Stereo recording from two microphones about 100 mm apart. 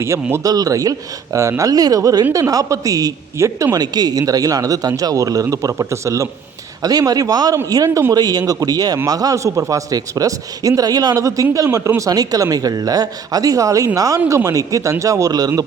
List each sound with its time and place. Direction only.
0.0 s speech: 25° right (ahead or behind)
0.4 s speech: 40° right (ahead or behind)
7.9 s speech: 25° right (ahead or behind)
8.1 s speech: 40° right (ahead or behind)